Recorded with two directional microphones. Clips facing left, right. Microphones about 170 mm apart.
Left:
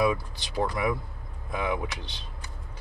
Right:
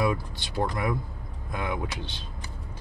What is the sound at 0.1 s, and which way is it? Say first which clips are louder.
Speech: even; 5° left (ahead or behind).